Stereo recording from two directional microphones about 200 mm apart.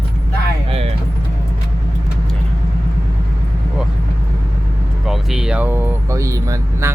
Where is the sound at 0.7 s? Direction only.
30° right (ahead or behind).